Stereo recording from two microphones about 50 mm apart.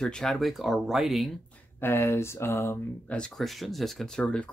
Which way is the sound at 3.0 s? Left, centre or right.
Left.